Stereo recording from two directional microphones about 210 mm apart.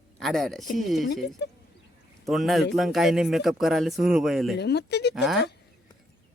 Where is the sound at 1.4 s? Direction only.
50° left (ahead or behind).